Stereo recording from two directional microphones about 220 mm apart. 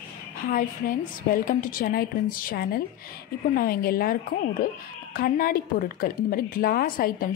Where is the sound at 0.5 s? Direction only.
40° left (ahead or behind).